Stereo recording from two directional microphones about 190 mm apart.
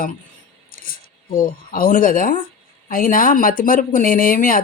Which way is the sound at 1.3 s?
50° left (ahead or behind).